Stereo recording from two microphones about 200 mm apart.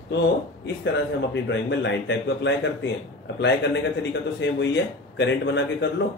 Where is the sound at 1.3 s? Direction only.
60° left (ahead or behind).